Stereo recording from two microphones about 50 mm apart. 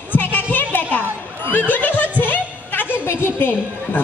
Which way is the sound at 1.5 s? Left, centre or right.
Left.